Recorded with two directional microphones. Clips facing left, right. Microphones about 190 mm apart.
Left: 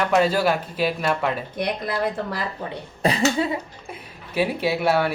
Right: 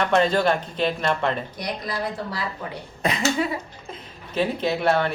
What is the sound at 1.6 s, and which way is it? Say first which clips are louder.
Speech: left 4 dB; 55° left (ahead or behind).